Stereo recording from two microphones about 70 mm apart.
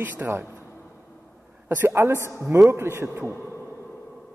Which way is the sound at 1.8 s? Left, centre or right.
Right.